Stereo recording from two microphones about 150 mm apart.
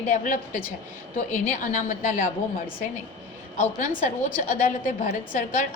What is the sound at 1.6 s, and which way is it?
Speech, 60° left (ahead or behind).